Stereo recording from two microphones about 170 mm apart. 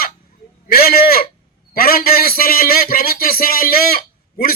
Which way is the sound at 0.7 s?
60° left (ahead or behind).